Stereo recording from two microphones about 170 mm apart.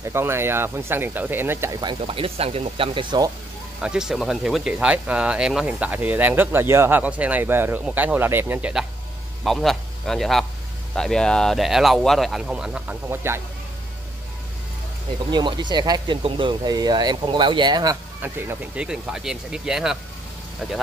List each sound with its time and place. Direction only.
0.0 s speech: 15° right (ahead or behind)
3.8 s a man's voice: 5° right (ahead or behind)
15.3 s speech: 25° right (ahead or behind)
18.2 s speech: 10° right (ahead or behind)